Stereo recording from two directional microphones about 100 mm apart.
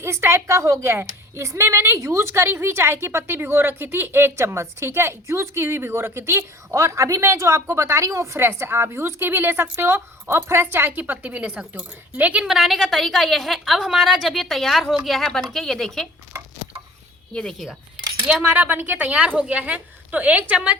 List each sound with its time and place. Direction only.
0.0 s a woman's voice: 25° right (ahead or behind); by 16.0 s 5° left (ahead or behind)
17.3 s speech: 5° left (ahead or behind)
18.4 s a woman's voice: 15° right (ahead or behind)